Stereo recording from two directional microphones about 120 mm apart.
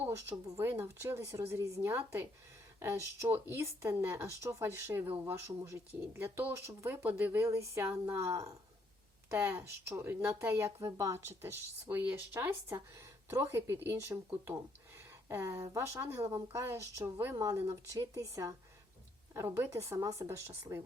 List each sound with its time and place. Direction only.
0.0 s speech: 20° right (ahead or behind)
11.9 s speech: 15° right (ahead or behind)